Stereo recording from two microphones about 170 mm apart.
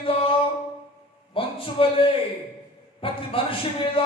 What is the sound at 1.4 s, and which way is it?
Speech, 30° left (ahead or behind).